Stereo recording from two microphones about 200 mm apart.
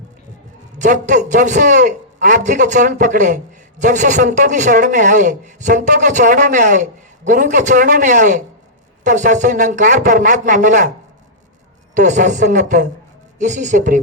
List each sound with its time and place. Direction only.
0.8 s a man's voice: 40° right (ahead or behind)
11.9 s a man's voice: 40° right (ahead or behind)